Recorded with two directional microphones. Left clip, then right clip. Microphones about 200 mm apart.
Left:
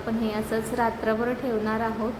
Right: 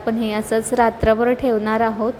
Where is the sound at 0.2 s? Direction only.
35° right (ahead or behind).